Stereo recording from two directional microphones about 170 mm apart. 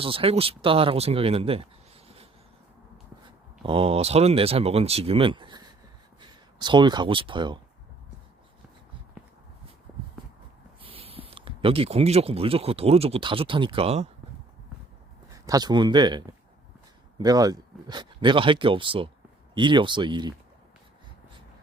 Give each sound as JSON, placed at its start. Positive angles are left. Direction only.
{"t": 0.0, "sound": "speech", "side_deg": -30}
{"t": 3.2, "sound": "speech", "side_deg": -30}
{"t": 10.8, "sound": "speech", "side_deg": -30}
{"t": 15.3, "sound": "speech", "side_deg": -20}